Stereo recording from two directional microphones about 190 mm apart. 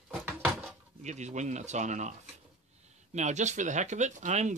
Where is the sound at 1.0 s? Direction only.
40° right (ahead or behind).